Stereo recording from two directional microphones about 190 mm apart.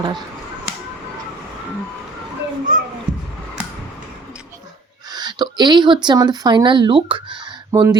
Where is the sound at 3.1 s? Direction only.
25° right (ahead or behind).